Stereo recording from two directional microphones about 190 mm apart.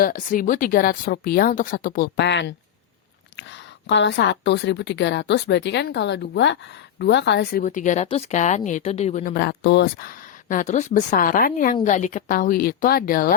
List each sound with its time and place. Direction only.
0.0 s speech: 45° left (ahead or behind)
2.2 s a woman's voice: 65° left (ahead or behind)
7.6 s speech: 40° left (ahead or behind)